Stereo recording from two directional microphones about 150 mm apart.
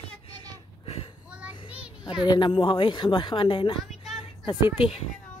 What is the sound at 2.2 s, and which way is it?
A woman's voice, 30° left (ahead or behind).